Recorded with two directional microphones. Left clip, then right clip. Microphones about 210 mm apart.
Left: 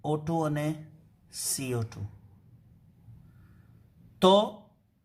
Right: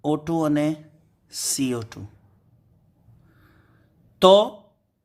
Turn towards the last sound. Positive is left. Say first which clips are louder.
# right 7 dB
turn(degrees=-35)  # may be behind; listen again after turning